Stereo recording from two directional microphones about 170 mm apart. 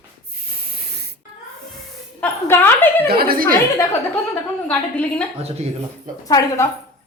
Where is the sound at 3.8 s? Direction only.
15° left (ahead or behind).